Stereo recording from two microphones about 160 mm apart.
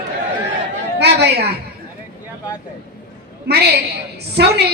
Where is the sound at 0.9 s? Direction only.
90° right.